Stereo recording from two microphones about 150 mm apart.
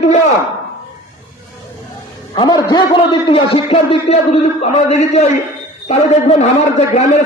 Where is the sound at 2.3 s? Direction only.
30° left (ahead or behind); by 6.4 s 45° left (ahead or behind).